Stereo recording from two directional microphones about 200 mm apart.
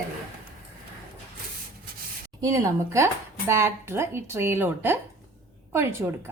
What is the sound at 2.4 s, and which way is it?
Speech, 15° right (ahead or behind).